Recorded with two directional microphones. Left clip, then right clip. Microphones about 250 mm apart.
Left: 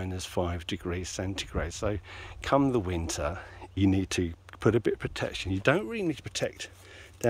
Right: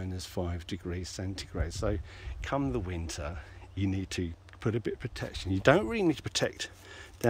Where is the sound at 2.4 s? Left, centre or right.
Left.